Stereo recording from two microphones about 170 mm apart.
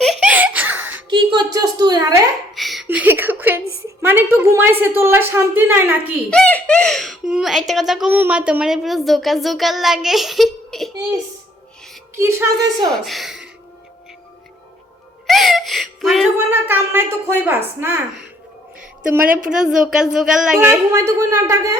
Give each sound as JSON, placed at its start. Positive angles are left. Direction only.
{"t": 0.0, "sound": "giggle", "side_deg": 0}
{"t": 1.1, "sound": "a woman's voice", "side_deg": -25}
{"t": 2.6, "sound": "a sound", "side_deg": 0}
{"t": 2.8, "sound": "a woman's voice", "side_deg": -10}
{"t": 6.3, "sound": "speech", "side_deg": 5}
{"t": 12.1, "sound": "a woman's voice", "side_deg": -15}
{"t": 12.9, "sound": "speech", "side_deg": 0}
{"t": 15.3, "sound": "a sound", "side_deg": 0}
{"t": 16.5, "sound": "a woman's voice", "side_deg": -10}
{"t": 19.5, "sound": "a woman's voice", "side_deg": -5}